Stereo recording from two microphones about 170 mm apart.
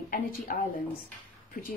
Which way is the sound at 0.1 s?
50° left (ahead or behind).